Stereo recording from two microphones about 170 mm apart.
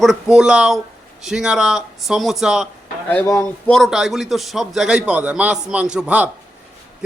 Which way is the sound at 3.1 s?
15° left (ahead or behind).